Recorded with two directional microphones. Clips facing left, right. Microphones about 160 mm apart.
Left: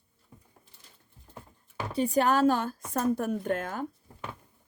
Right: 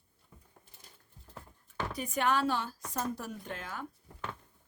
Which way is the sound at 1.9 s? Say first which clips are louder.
Left 7 dB; 30° left (ahead or behind).